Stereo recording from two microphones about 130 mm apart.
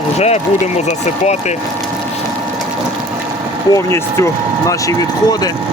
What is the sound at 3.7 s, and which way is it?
Speech, 20° left (ahead or behind).